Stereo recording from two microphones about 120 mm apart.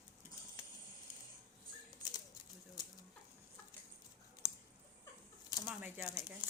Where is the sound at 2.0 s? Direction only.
30° left (ahead or behind).